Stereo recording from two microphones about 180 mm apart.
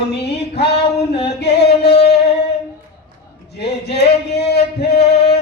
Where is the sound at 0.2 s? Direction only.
65° left (ahead or behind).